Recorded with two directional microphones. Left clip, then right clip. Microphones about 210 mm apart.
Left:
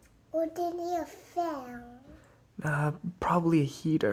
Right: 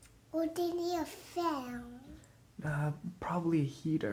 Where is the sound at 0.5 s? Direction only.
30° right (ahead or behind).